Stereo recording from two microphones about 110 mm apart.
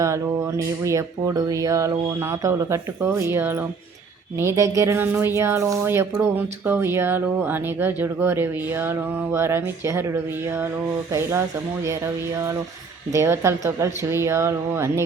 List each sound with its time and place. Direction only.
0.0 s speech: 30° right (ahead or behind)
13.1 s speech: 25° right (ahead or behind)